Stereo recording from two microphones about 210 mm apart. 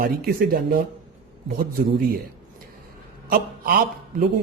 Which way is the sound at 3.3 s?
45° right (ahead or behind).